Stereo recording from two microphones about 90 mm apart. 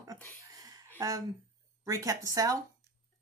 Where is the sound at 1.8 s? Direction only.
40° right (ahead or behind).